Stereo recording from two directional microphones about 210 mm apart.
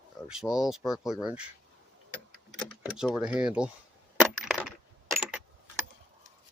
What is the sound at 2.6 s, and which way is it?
Speech, centre (ahead or behind).